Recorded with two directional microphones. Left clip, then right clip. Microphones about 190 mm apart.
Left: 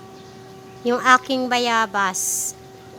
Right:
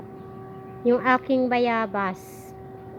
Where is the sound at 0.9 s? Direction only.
10° left (ahead or behind).